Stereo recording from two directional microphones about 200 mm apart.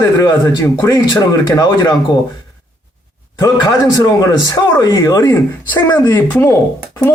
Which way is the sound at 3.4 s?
20° left (ahead or behind).